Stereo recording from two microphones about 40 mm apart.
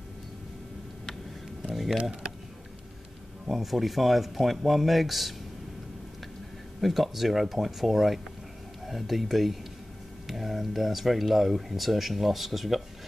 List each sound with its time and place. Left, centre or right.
1.7 s a sound: centre
2.0 s speech: right
3.4 s speech: centre
6.8 s speech: centre